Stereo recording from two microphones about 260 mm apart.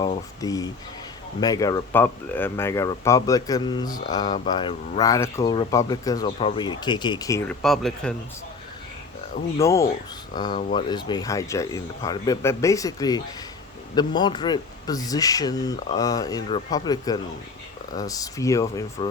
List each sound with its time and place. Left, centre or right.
0.0 s speech: centre
9.6 s speech: centre